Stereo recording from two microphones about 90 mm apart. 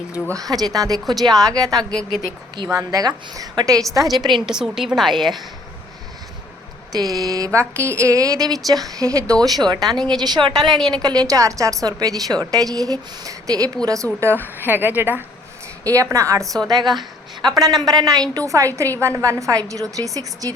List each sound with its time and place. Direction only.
0.3 s a woman's voice: 45° right (ahead or behind)
3.7 s a woman's voice: 40° right (ahead or behind); by 4.4 s 55° right (ahead or behind)
4.4 s a woman's voice: 5° right (ahead or behind)
6.9 s a woman's voice: 45° right (ahead or behind)
7.6 s a woman's voice: 30° right (ahead or behind); by 9.7 s 50° right (ahead or behind)
9.8 s a woman's voice: 5° left (ahead or behind)
10.2 s a woman's voice: 50° right (ahead or behind)
10.6 s a woman's voice: centre (ahead or behind)
10.8 s a woman's voice: 50° right (ahead or behind)
14.4 s speech: 20° right (ahead or behind)
15.8 s a woman's voice: 40° right (ahead or behind)
17.5 s a woman's voice: 45° right (ahead or behind)